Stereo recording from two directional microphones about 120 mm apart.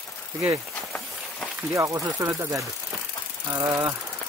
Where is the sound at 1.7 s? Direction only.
25° right (ahead or behind).